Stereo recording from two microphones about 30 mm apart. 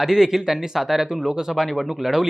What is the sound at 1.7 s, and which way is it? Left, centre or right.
Speech, centre.